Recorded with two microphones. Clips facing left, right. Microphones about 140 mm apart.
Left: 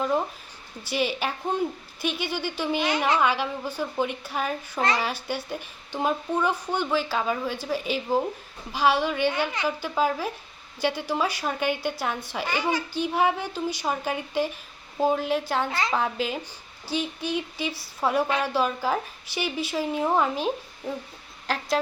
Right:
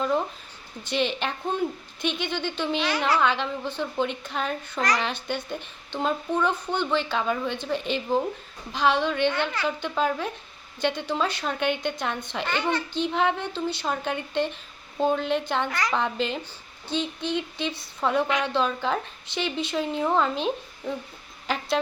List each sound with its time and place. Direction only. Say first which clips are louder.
0.0 s speech: even; 10° left (ahead or behind)
2.8 s a child's voice: left 1 dB; 20° left (ahead or behind)
3.2 s speech: even; 10° left (ahead or behind)
15.7 s a child's voice: even; 25° left (ahead or behind)
16.0 s speech: even; 5° left (ahead or behind)